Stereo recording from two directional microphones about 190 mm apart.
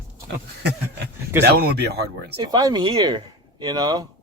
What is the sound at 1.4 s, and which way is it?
Speech, 60° right (ahead or behind).